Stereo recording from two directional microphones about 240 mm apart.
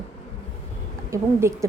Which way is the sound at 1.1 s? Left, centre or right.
Centre.